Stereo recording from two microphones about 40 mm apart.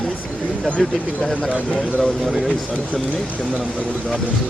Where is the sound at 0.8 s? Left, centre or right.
Centre.